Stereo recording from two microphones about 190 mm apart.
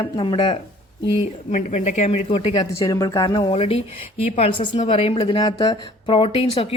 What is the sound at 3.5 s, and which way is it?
A woman's voice, 30° left (ahead or behind).